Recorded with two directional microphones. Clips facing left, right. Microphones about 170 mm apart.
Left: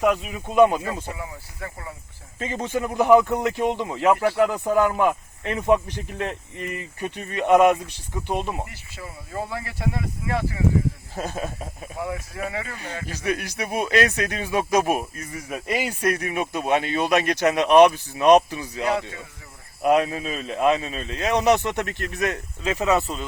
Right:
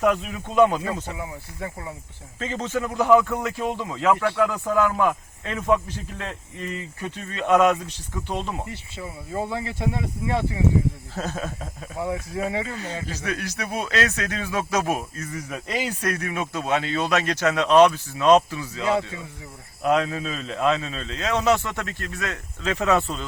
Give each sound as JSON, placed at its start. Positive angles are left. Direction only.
{"t": 0.0, "sound": "a man's voice", "side_deg": 5}
{"t": 1.1, "sound": "speech", "side_deg": -15}
{"t": 2.4, "sound": "a man's voice", "side_deg": 15}
{"t": 9.5, "sound": "speech", "side_deg": -20}
{"t": 11.1, "sound": "a man's voice", "side_deg": 15}
{"t": 12.1, "sound": "speech", "side_deg": -25}
{"t": 13.1, "sound": "a man's voice", "side_deg": 10}
{"t": 22.8, "sound": "speech", "side_deg": 5}